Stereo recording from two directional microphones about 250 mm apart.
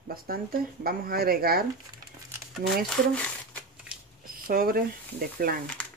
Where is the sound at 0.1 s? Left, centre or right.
Right.